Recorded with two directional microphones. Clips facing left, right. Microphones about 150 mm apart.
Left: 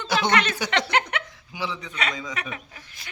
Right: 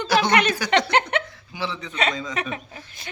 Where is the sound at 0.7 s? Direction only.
20° right (ahead or behind).